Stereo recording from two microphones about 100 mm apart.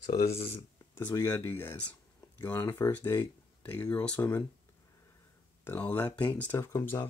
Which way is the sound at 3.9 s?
10° left (ahead or behind).